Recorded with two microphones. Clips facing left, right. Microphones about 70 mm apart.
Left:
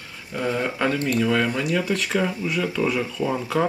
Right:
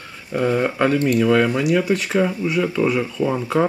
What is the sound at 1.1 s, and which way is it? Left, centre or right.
Speech, centre.